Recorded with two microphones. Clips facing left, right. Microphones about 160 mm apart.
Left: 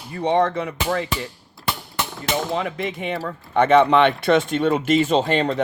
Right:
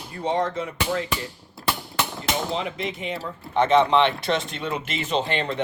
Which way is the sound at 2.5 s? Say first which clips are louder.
Left 3 dB; 55° left (ahead or behind).